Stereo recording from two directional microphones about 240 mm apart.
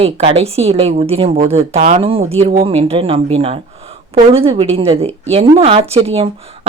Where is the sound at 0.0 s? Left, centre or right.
Right.